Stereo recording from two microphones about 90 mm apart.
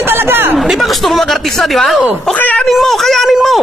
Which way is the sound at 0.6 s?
Centre (ahead or behind).